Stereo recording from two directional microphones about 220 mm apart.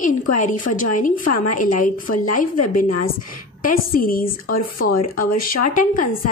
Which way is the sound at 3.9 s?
40° left (ahead or behind).